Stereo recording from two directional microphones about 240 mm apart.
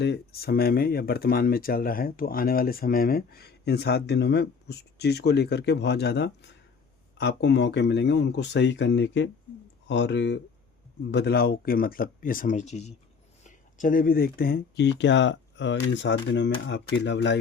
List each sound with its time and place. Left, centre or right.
0.0 s speech: left